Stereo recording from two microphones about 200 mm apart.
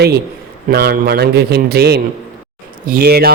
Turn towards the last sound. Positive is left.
turn(degrees=-50)  # may be behind; listen again after turning